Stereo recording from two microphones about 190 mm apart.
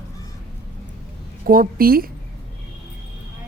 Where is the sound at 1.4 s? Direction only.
50° right (ahead or behind).